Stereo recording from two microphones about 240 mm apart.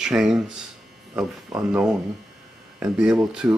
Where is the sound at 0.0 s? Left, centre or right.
Centre.